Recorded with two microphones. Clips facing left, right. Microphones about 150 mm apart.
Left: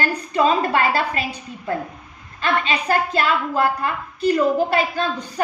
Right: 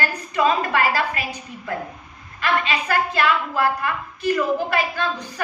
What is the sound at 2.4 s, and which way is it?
A woman's voice, 30° left (ahead or behind).